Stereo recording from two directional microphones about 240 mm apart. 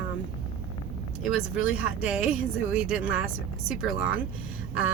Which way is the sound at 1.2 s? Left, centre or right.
Centre.